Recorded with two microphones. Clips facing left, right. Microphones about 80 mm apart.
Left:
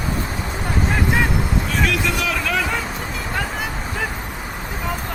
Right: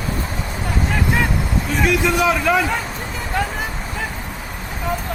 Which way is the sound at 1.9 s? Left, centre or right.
Right.